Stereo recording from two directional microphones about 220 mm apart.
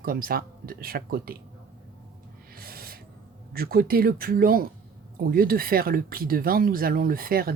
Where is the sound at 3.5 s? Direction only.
40° right (ahead or behind).